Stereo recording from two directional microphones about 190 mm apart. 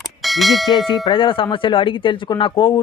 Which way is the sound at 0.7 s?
20° left (ahead or behind).